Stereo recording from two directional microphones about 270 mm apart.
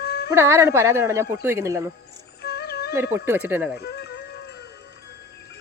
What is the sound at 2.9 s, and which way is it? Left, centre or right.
Speech, centre.